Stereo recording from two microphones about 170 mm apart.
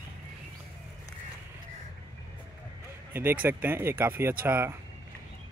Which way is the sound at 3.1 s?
10° right (ahead or behind).